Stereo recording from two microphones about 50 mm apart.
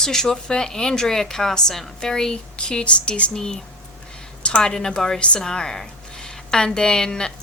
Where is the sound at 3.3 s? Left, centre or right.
Centre.